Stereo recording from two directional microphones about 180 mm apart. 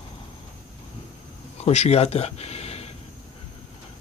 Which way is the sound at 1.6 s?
35° left (ahead or behind).